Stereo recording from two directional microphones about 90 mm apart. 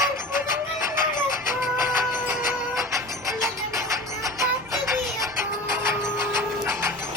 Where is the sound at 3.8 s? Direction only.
35° right (ahead or behind).